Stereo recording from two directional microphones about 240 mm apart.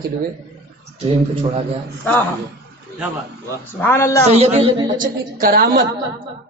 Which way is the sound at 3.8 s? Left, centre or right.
Centre.